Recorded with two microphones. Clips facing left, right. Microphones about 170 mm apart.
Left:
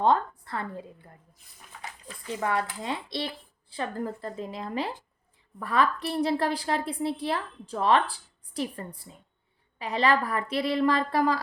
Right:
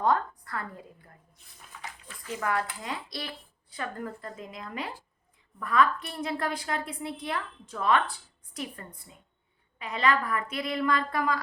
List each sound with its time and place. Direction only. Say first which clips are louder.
0.0 s a woman's voice: left 3 dB; 25° left (ahead or behind)